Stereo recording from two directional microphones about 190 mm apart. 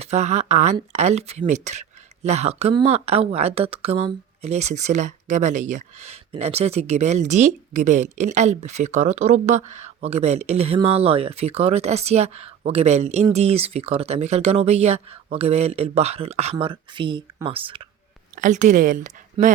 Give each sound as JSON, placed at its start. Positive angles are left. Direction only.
{"t": 0.0, "sound": "speech", "side_deg": -35}
{"t": 18.3, "sound": "speech", "side_deg": -40}